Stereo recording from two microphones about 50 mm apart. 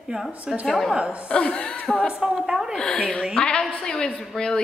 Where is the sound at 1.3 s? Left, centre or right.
Left.